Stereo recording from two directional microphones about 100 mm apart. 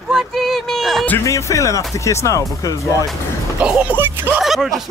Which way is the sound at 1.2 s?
30° left (ahead or behind).